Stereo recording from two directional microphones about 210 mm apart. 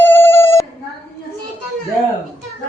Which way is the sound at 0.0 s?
10° left (ahead or behind).